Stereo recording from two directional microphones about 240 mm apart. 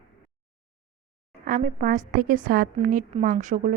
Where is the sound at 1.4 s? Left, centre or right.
Right.